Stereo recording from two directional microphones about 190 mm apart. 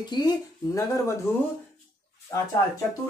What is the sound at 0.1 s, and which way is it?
Speech, 25° left (ahead or behind).